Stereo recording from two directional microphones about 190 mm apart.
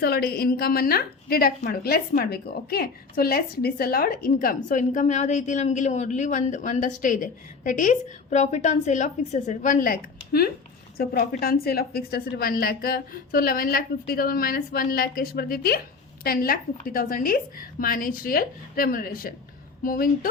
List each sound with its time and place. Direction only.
0.0 s a woman's voice: 55° left (ahead or behind)